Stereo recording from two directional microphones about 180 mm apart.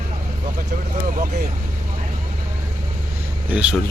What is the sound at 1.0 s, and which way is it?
Speech, 50° right (ahead or behind).